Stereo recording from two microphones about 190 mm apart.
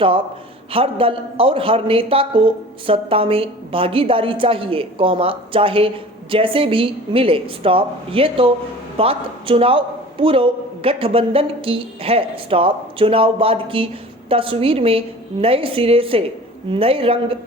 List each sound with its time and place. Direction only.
0.7 s a man's voice: 30° right (ahead or behind)